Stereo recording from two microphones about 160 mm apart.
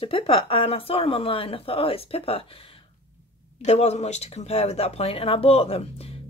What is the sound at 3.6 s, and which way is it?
Speech, 45° left (ahead or behind).